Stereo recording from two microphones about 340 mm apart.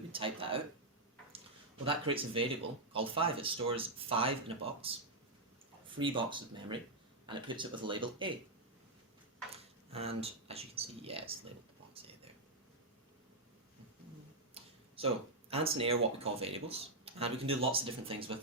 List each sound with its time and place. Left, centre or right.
0.1 s speech: centre
1.8 s speech: centre
9.9 s speech: centre
14.5 s a sound: centre
16.2 s speech: centre